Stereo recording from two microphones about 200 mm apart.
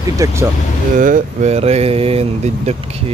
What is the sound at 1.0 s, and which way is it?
Speech, 40° right (ahead or behind).